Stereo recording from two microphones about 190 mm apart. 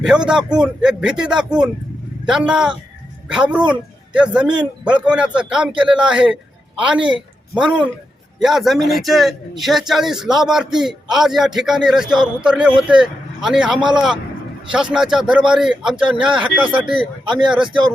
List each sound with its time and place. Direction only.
0.0 s a man's voice: 5° right (ahead or behind)
17.6 s speech: 25° right (ahead or behind)